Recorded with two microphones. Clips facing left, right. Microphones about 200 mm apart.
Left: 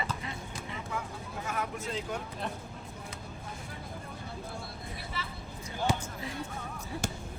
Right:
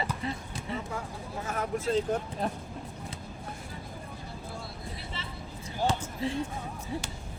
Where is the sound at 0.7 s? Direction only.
35° right (ahead or behind).